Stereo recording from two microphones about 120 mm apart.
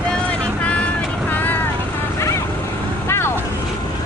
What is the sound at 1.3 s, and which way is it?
Vehicle, 15° left (ahead or behind).